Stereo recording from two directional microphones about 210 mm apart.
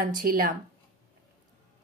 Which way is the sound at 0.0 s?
40° right (ahead or behind).